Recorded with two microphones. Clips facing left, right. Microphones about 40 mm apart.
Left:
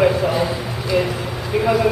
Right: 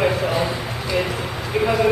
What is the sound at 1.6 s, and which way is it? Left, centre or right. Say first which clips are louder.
Speech: left 1 dB; centre.